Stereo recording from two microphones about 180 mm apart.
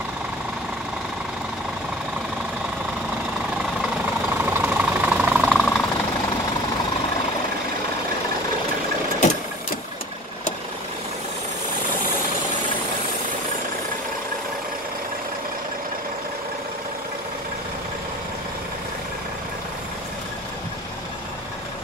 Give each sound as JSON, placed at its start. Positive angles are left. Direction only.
{"t": 4.5, "sound": "engine", "side_deg": -10}